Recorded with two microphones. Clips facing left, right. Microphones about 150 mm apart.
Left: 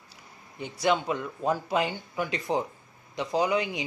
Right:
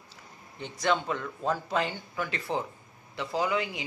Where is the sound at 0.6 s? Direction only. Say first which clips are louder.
Left 2 dB; 10° left (ahead or behind).